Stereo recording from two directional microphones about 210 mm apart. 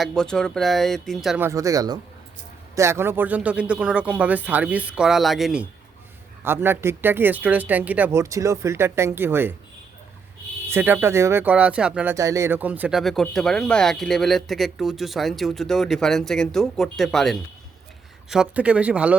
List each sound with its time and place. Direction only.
0.0 s speech: 5° left (ahead or behind)
1.5 s speech: 15° right (ahead or behind)
10.7 s speech: 10° right (ahead or behind)